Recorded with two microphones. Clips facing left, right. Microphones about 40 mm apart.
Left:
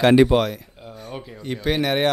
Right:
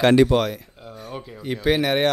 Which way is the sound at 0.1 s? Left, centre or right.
Centre.